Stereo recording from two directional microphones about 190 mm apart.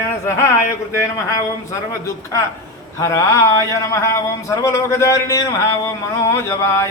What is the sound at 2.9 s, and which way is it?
A man's voice, 15° left (ahead or behind).